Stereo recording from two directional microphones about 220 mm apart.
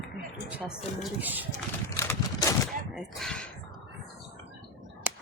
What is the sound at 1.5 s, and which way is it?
Horse, 15° left (ahead or behind).